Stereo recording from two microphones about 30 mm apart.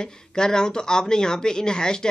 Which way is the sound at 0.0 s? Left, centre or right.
Left.